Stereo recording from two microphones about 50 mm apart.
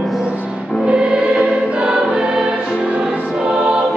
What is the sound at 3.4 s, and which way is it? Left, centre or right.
Choir, centre.